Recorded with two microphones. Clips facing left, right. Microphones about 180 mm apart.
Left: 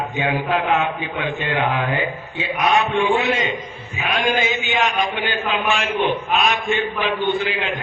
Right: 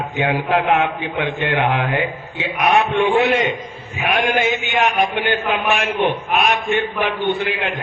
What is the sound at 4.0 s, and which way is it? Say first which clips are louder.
A man's voice: right 3 dB; 60° right (ahead or behind).